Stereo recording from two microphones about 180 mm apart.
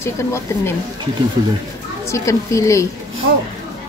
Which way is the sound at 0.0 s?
15° left (ahead or behind).